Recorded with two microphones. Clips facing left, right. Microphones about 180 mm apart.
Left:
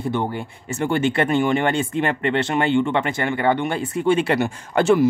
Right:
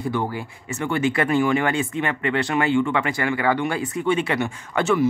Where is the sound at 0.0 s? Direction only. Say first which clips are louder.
Left 1 dB; 25° left (ahead or behind).